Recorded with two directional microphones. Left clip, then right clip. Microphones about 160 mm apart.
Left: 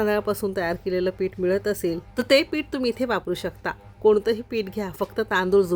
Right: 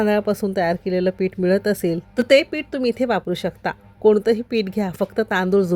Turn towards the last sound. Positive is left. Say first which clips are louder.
# right 1 dB
turn(degrees=-15)  # may be behind; listen again after turning